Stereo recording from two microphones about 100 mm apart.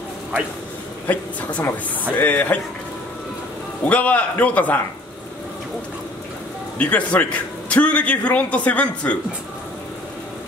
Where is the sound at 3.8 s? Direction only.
15° left (ahead or behind).